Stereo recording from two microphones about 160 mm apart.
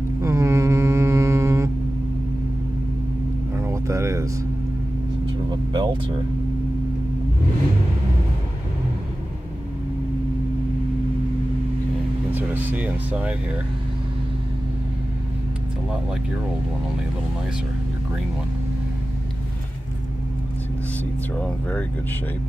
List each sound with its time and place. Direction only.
0.2 s mantra: 20° right (ahead or behind)
3.5 s vehicle: 20° right (ahead or behind)
5.5 s speech: 30° right (ahead or behind)
12.3 s speech: 10° right (ahead or behind)
21.4 s speech: 10° left (ahead or behind)